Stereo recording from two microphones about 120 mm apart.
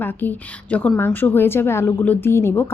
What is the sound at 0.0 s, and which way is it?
A woman's voice, 15° left (ahead or behind).